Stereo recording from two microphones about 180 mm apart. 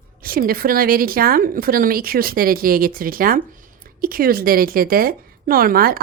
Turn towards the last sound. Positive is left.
turn(degrees=-55)  # may be behind; listen again after turning